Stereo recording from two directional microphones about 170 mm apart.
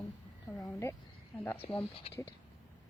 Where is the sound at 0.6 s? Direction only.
15° left (ahead or behind).